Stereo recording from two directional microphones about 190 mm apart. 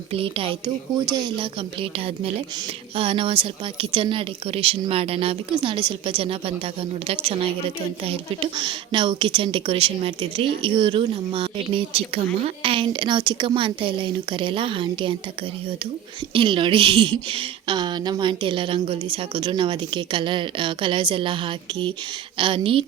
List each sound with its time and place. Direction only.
0.1 s a woman's voice: 30° right (ahead or behind)
16.3 s a woman's voice: 25° right (ahead or behind)